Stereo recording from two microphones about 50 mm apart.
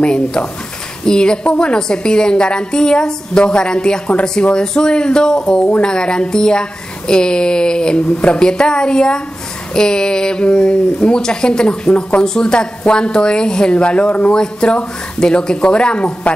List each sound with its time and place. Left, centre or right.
0.0 s speech: centre